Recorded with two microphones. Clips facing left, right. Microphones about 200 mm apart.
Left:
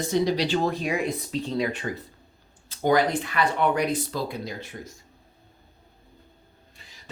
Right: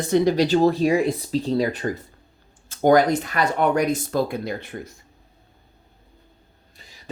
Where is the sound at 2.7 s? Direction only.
45° right (ahead or behind).